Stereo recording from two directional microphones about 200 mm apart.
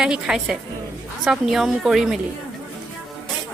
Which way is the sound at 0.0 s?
5° right (ahead or behind).